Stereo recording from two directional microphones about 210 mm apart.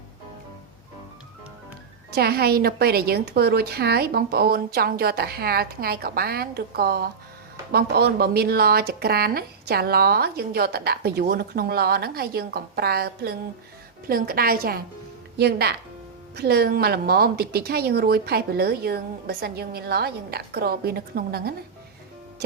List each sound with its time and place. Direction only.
2.1 s speech: 50° right (ahead or behind)